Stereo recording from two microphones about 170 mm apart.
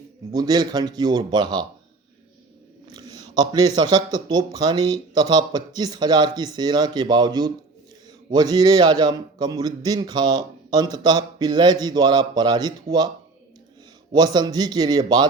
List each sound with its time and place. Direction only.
0.3 s a man's voice: 25° right (ahead or behind)
2.9 s a man's voice: 20° right (ahead or behind)
14.1 s a man's voice: 25° right (ahead or behind)